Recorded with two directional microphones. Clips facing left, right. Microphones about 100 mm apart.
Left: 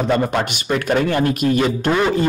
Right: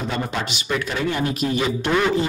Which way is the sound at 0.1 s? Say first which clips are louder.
Left 8 dB; 50° left (ahead or behind).